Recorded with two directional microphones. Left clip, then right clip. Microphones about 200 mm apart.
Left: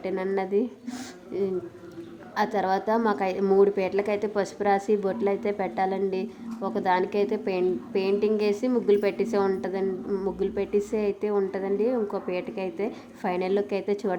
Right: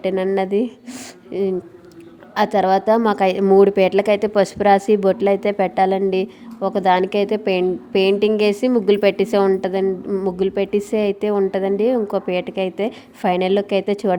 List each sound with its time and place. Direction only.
0.0 s a woman's voice: 40° right (ahead or behind)